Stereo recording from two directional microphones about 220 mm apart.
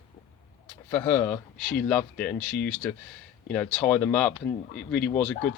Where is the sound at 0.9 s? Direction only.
10° left (ahead or behind).